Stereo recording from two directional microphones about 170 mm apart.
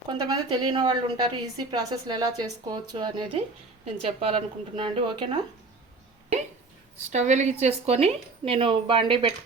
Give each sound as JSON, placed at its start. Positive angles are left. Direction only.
{"t": 0.1, "sound": "a woman's voice", "side_deg": -25}
{"t": 7.1, "sound": "a woman's voice", "side_deg": -45}